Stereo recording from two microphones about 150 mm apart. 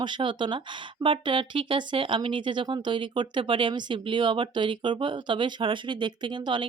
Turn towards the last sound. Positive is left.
turn(degrees=-30)  # may be behind; listen again after turning